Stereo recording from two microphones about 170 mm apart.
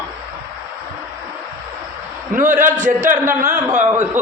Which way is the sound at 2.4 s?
50° right (ahead or behind).